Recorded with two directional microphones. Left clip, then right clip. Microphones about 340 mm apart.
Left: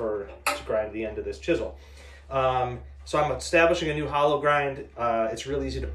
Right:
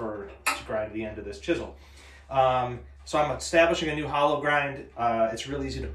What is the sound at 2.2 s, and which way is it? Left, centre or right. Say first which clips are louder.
Speech: right 1 dB; centre.